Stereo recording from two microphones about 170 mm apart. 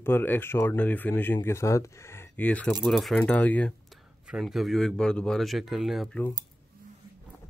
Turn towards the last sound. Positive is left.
turn(degrees=0)  # may be behind; listen again after turning